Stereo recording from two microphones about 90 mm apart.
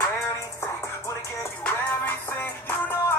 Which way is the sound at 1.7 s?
20° left (ahead or behind).